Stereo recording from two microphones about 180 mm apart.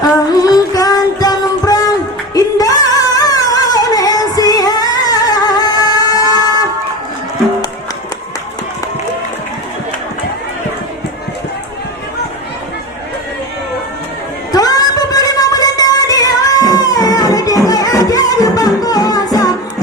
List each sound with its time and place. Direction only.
0.0 s music: 20° left (ahead or behind)
2.3 s singing: 20° left (ahead or behind)
14.5 s music: 20° left (ahead or behind)